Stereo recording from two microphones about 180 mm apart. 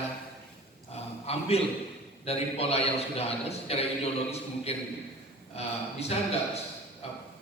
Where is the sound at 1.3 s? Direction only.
35° left (ahead or behind).